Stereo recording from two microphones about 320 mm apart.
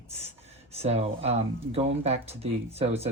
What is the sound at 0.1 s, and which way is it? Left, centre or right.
Speech, centre.